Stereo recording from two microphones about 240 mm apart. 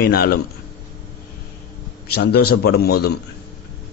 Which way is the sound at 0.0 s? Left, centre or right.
Left.